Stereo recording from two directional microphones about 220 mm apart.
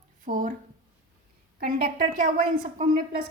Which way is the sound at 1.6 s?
40° right (ahead or behind).